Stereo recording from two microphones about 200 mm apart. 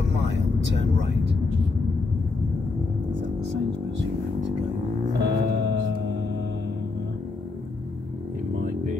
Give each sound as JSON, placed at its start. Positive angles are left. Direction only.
{"t": 0.2, "sound": "vehicle", "side_deg": -60}
{"t": 5.2, "sound": "music", "side_deg": -60}